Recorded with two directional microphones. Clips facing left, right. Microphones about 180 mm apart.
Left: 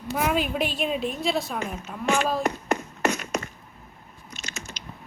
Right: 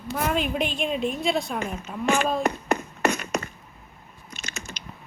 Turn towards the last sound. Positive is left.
turn(degrees=-55)  # may be behind; listen again after turning